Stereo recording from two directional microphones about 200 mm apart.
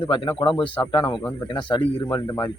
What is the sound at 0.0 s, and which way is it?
Speech, 25° left (ahead or behind).